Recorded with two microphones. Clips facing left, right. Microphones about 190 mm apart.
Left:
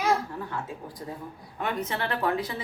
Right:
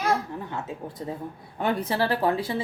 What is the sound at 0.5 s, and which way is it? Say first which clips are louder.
Speech: right 2 dB; 25° right (ahead or behind).